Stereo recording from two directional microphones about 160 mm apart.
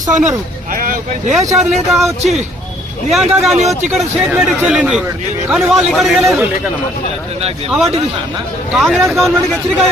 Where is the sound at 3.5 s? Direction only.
45° right (ahead or behind).